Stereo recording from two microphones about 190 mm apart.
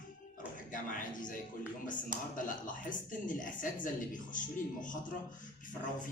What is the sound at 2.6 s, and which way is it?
A man's voice, 45° left (ahead or behind).